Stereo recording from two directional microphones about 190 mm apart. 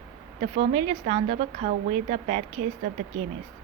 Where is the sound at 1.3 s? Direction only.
45° right (ahead or behind).